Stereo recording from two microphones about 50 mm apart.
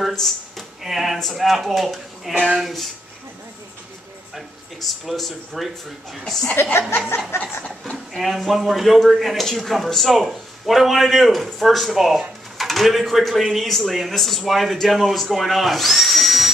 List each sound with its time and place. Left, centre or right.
0.1 s speech: centre
4.4 s speech: centre
6.4 s speech: left
8.1 s speech: centre